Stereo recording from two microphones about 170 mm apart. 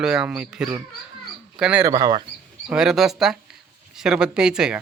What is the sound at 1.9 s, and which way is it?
Speech, 25° right (ahead or behind).